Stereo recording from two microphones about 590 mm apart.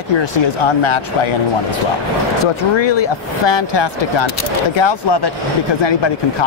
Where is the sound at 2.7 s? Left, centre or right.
Left.